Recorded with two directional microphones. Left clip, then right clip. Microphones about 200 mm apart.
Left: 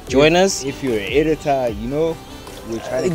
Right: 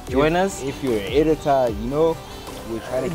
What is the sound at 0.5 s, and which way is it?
Speech, 30° left (ahead or behind).